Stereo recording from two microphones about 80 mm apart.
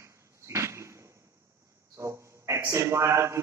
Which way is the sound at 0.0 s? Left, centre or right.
Right.